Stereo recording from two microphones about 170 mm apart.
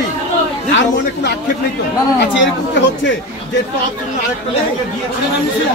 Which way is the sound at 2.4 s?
90° left.